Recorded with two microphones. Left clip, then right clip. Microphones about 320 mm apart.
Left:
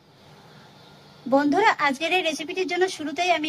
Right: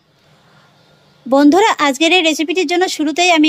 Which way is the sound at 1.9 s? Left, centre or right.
Centre.